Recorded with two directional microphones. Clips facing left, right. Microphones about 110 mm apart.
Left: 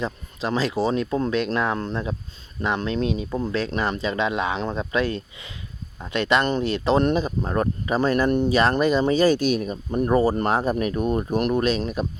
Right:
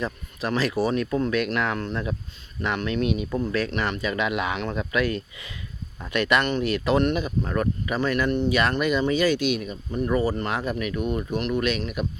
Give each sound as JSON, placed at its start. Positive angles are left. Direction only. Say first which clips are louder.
{"t": 0.0, "sound": "speech", "louder": "left 1 dB", "side_deg": 20}